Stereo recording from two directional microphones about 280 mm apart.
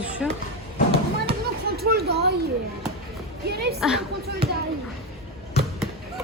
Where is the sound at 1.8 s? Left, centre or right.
Right.